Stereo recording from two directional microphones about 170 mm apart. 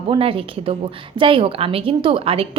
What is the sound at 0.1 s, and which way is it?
A woman's voice, 30° right (ahead or behind).